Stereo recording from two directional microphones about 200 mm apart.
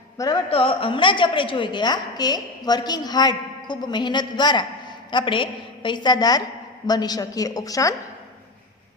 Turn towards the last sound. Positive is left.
turn(degrees=15)  # may be behind; listen again after turning